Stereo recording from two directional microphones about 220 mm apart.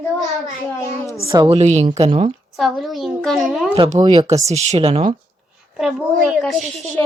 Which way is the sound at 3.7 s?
25° right (ahead or behind).